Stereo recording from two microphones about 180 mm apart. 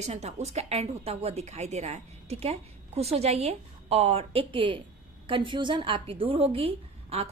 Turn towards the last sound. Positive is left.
turn(degrees=-35)  # may be behind; listen again after turning